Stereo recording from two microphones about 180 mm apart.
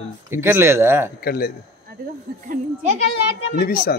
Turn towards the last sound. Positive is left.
turn(degrees=55)  # may be behind; listen again after turning